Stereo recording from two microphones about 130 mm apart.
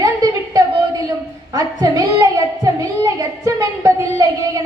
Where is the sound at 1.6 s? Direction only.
25° right (ahead or behind).